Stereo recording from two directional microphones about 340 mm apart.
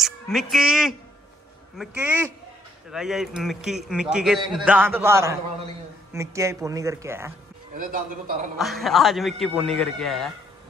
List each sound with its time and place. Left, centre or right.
0.0 s a man's voice: centre
7.7 s a man's voice: right
8.5 s a man's voice: centre